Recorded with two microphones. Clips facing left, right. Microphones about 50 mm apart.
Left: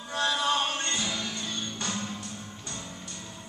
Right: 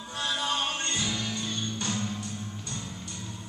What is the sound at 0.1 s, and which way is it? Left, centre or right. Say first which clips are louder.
Music: left 4 dB; left.